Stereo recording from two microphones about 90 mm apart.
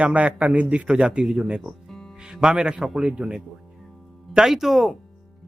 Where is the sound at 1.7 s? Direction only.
5° left (ahead or behind).